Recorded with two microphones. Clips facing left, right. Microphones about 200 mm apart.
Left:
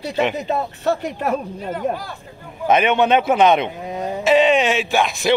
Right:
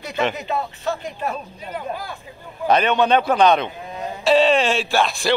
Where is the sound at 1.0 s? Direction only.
70° left (ahead or behind).